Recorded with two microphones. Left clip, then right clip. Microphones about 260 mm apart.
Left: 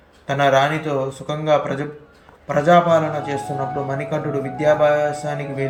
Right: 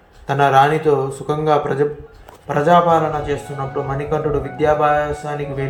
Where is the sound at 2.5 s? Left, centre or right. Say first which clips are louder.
Right 1 dB; centre.